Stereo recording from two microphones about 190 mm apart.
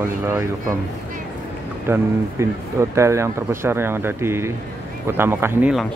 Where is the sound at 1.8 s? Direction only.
15° right (ahead or behind).